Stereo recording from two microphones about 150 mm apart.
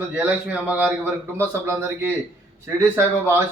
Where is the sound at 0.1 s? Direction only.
10° right (ahead or behind).